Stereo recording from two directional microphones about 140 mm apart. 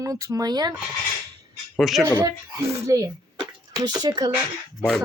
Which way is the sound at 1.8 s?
Centre (ahead or behind).